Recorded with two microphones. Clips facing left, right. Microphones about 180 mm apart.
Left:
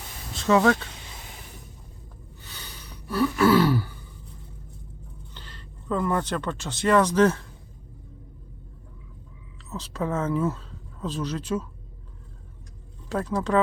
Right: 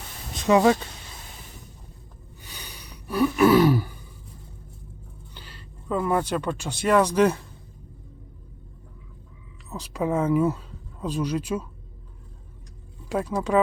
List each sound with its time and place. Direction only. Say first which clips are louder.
0.3 s speech: right 2 dB; 15° right (ahead or behind)
2.4 s gasp: right 1 dB; 15° right (ahead or behind)
5.3 s speech: even; 10° right (ahead or behind)
9.6 s speech: right 3 dB; 15° right (ahead or behind)
13.1 s speech: right 1 dB; 10° right (ahead or behind)